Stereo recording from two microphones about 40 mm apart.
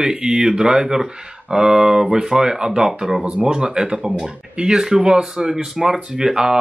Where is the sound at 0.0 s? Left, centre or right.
Right.